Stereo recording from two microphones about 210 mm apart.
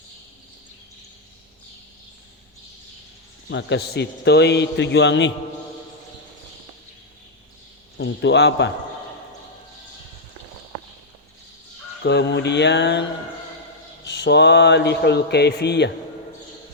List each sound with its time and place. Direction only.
3.5 s a man's voice: 55° left (ahead or behind)
7.9 s a man's voice: 55° left (ahead or behind)
12.0 s a man's voice: 55° left (ahead or behind)